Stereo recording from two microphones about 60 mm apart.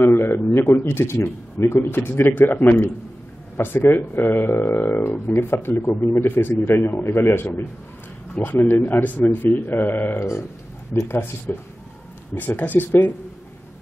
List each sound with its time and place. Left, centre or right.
0.0 s a sound: left
0.5 s a man's voice: left
4.5 s speech: left
4.7 s speech: left
6.9 s a man's voice: left
10.1 s a man's voice: left
11.1 s speech: left